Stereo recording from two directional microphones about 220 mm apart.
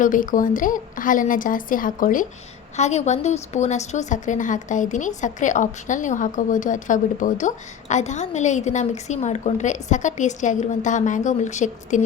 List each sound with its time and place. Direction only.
0.0 s a woman's voice: 35° left (ahead or behind)